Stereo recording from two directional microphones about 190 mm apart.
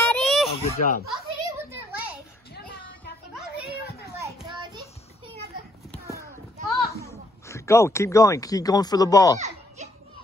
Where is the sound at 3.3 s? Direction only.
5° right (ahead or behind).